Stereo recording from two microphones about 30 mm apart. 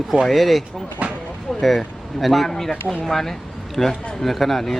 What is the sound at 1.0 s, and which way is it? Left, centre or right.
Speech, right.